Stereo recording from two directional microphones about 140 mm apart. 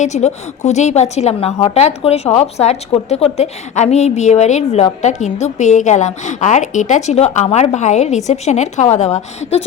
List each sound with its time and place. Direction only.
0.0 s a woman's voice: 55° left (ahead or behind)